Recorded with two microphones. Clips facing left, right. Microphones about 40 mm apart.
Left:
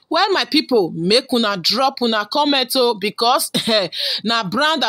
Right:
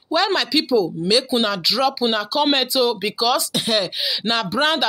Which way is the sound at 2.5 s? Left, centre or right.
Centre.